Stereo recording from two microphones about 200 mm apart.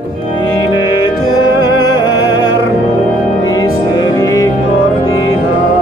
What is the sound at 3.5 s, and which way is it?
Music, 20° left (ahead or behind).